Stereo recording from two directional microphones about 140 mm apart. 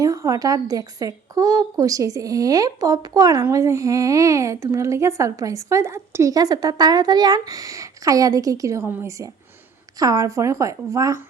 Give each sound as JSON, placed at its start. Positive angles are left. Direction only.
{"t": 0.0, "sound": "a woman's voice", "side_deg": -25}